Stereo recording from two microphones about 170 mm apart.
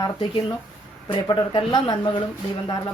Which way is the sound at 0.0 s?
30° left (ahead or behind).